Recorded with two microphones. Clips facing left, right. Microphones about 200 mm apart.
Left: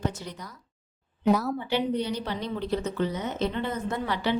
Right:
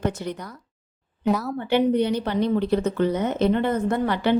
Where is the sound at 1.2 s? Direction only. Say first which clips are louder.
Even; centre (ahead or behind).